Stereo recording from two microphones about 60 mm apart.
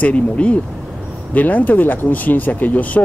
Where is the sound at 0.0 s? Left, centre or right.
Left.